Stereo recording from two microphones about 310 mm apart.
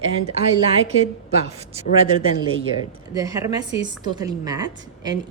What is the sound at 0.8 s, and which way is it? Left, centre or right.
Speech, centre.